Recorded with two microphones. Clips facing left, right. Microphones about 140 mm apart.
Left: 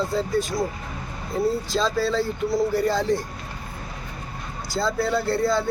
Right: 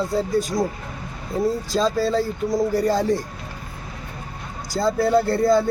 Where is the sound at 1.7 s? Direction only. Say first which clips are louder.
Right 3 dB; 40° right (ahead or behind).